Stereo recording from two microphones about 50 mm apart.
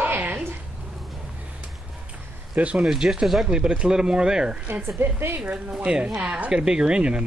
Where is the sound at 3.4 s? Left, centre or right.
Centre.